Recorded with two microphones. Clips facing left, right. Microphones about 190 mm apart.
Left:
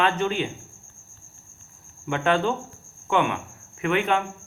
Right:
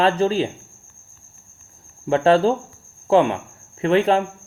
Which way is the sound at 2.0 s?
35° right (ahead or behind).